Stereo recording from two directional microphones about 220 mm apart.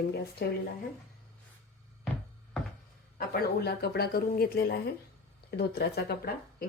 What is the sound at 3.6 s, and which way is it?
Speech, 45° left (ahead or behind).